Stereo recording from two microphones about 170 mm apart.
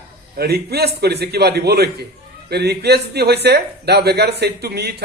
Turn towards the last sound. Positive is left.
turn(degrees=-70)  # may be behind; listen again after turning